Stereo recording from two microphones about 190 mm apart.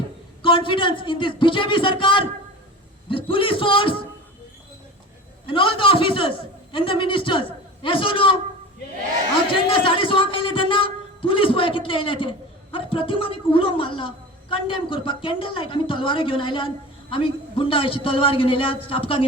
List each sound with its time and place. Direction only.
0.4 s speech: 25° left (ahead or behind)
5.5 s speech: 25° left (ahead or behind)
9.5 s speech: 25° left (ahead or behind)